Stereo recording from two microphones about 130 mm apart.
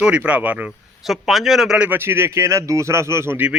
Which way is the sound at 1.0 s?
Centre (ahead or behind).